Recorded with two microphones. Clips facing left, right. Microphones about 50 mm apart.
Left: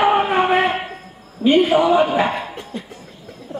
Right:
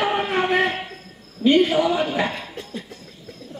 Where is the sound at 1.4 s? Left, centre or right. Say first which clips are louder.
Left 3 dB; centre.